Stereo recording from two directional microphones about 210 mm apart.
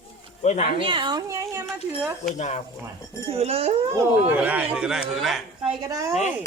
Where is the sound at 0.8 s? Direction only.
25° right (ahead or behind).